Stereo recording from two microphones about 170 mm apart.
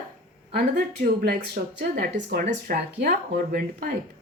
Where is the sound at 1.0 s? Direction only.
55° right (ahead or behind).